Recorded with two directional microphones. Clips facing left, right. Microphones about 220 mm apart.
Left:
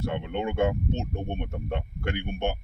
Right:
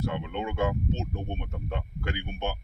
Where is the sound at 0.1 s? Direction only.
55° left (ahead or behind).